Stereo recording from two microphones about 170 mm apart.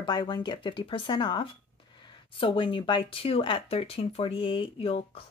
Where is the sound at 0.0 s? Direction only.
30° left (ahead or behind).